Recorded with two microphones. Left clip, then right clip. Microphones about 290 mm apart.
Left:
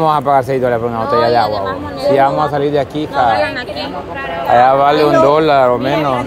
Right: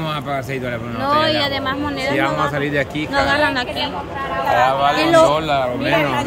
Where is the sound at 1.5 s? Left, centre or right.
Right.